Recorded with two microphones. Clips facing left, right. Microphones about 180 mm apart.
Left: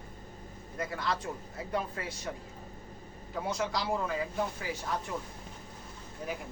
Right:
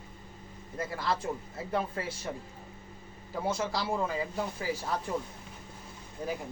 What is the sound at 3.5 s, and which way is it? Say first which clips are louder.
Speech: right 1 dB; 30° right (ahead or behind).